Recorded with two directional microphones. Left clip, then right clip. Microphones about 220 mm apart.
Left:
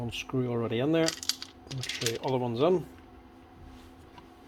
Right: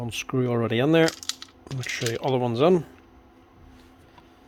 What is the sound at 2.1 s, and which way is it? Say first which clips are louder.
Speech: right 8 dB; 35° right (ahead or behind).